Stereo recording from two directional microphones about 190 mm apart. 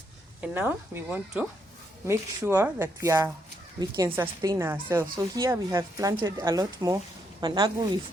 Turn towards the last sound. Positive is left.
turn(degrees=-20)  # may be behind; listen again after turning